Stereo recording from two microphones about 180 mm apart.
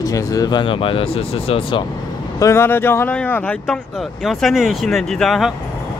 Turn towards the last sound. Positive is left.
turn(degrees=0)  # may be behind; listen again after turning